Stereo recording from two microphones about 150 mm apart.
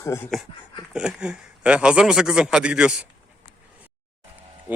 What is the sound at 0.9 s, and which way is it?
A man's voice, 5° right (ahead or behind).